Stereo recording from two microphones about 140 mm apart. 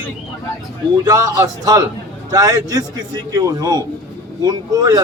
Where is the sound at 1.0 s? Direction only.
25° right (ahead or behind).